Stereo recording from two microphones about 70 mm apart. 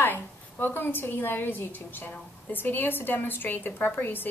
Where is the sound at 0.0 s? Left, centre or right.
Left.